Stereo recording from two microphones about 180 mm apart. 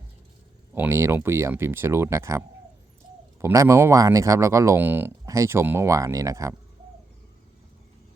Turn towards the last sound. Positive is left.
turn(degrees=-15)  # may be behind; listen again after turning